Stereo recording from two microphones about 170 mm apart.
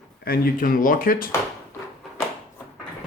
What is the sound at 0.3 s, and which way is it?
Speech, 60° left (ahead or behind).